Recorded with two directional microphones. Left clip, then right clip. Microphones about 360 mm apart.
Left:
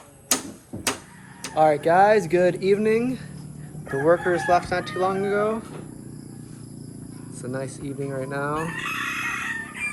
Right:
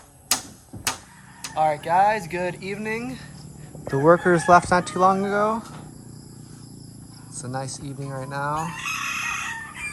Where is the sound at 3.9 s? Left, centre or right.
Right.